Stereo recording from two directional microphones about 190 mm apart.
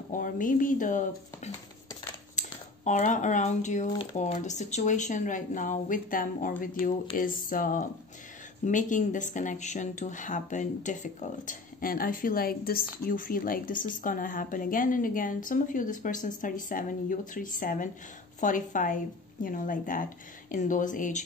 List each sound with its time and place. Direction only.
0.1 s speech: 45° left (ahead or behind)